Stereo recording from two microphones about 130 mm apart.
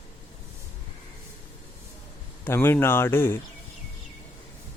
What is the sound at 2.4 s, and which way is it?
Speech, 15° left (ahead or behind).